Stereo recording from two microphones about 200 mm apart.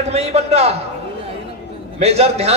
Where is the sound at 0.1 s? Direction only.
30° right (ahead or behind).